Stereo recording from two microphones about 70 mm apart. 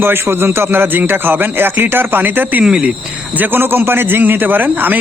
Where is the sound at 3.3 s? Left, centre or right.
Right.